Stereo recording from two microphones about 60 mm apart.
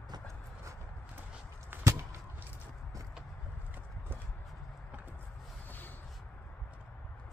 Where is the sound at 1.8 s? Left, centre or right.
Right.